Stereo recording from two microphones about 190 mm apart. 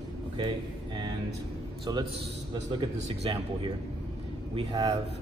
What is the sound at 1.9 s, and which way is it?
Speech, 20° right (ahead or behind).